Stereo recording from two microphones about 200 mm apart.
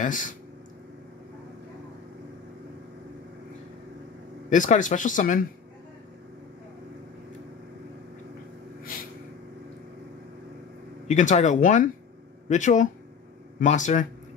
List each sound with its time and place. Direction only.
0.0 s speech: 40° left (ahead or behind)
4.5 s speech: 40° left (ahead or behind)
8.9 s vehicle: 45° left (ahead or behind)
11.1 s speech: 35° left (ahead or behind)